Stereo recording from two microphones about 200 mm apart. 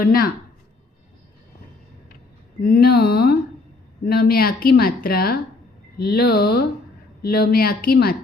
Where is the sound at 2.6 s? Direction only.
50° left (ahead or behind).